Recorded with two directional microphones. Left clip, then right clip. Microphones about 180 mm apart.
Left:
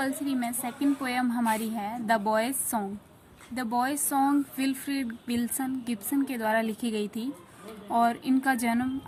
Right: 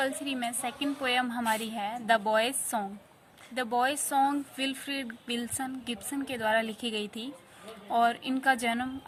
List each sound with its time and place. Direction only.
0.3 s speech: 25° right (ahead or behind)